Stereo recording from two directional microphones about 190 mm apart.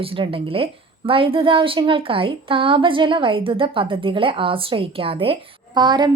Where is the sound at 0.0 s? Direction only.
30° right (ahead or behind).